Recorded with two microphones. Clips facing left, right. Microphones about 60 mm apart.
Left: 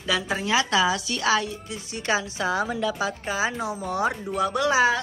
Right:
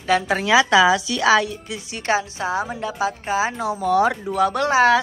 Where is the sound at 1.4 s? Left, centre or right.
Right.